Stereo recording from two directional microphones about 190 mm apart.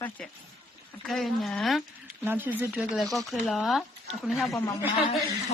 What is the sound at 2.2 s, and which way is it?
Speech, 10° right (ahead or behind).